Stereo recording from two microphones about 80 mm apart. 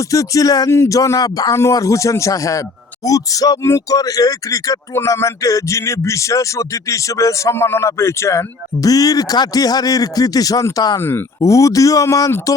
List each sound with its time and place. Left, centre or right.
0.1 s speech: left
0.7 s speech: left
0.9 s speech: left